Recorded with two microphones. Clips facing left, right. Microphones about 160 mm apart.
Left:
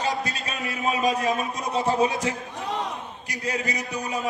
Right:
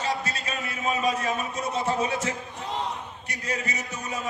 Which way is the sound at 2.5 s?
65° left (ahead or behind).